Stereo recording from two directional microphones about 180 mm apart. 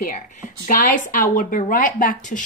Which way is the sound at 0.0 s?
45° left (ahead or behind).